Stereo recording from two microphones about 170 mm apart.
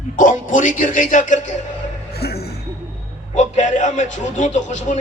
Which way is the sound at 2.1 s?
70° left (ahead or behind).